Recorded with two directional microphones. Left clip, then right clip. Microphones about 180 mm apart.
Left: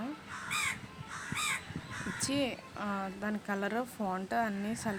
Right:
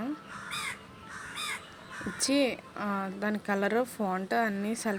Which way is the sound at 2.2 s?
20° right (ahead or behind).